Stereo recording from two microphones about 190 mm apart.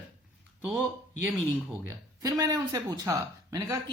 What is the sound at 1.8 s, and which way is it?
Speech, 15° right (ahead or behind).